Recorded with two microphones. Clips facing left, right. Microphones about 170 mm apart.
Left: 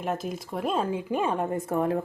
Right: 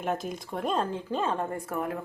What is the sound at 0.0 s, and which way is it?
Speech, centre (ahead or behind).